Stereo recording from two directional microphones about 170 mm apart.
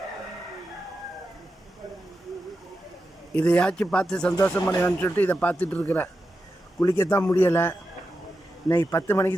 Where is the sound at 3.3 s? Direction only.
5° left (ahead or behind).